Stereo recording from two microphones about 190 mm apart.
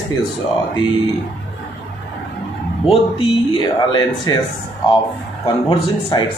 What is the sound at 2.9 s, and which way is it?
Speech, 25° left (ahead or behind).